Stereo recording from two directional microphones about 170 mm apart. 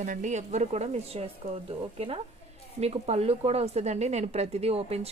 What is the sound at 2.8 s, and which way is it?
Speech, 40° right (ahead or behind).